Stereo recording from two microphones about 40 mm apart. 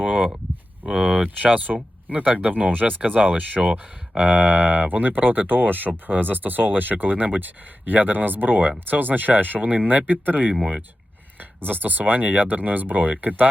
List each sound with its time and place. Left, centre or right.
0.0 s a sound: right
1.0 s speech: right
11.3 s speech: right